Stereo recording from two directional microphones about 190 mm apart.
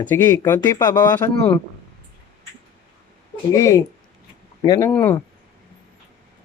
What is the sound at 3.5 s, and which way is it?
Speech, 15° left (ahead or behind).